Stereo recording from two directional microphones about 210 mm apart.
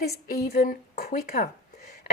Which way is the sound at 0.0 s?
50° left (ahead or behind).